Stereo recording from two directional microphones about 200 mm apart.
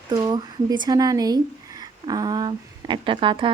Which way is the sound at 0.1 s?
20° right (ahead or behind).